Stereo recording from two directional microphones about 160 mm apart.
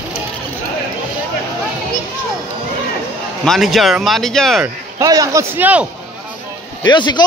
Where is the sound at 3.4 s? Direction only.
Centre (ahead or behind).